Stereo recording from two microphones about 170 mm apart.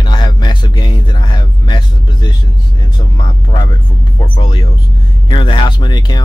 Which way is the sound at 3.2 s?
25° left (ahead or behind).